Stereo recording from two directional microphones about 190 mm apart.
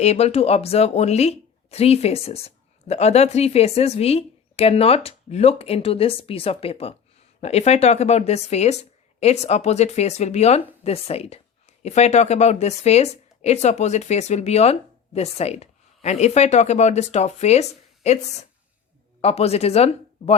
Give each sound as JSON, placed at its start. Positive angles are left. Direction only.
{"t": 0.0, "sound": "speech", "side_deg": 35}